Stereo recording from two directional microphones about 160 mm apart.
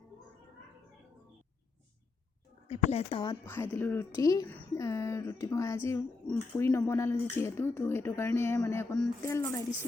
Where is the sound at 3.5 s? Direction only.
15° left (ahead or behind).